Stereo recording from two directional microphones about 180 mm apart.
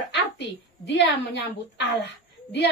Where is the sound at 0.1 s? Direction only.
75° left (ahead or behind).